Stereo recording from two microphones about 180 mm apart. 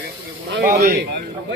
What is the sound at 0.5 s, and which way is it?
Speech, 55° right (ahead or behind).